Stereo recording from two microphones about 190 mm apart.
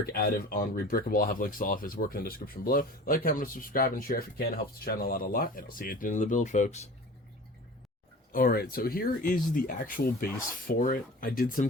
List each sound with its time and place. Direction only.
0.0 s speech: 50° left (ahead or behind)
8.3 s speech: 50° left (ahead or behind)